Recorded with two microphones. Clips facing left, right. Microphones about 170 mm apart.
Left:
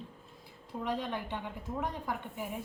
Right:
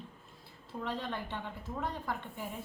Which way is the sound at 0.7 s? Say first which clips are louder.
Left 3 dB; 15° left (ahead or behind).